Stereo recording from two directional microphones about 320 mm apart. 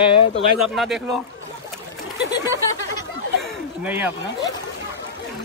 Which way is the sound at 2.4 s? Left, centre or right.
Centre.